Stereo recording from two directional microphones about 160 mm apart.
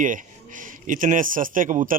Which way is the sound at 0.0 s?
55° right (ahead or behind).